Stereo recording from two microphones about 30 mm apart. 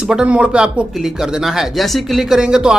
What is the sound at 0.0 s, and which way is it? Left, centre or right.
Speech, right.